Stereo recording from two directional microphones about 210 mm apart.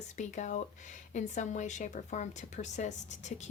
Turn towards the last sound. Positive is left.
turn(degrees=35)  # may be behind; listen again after turning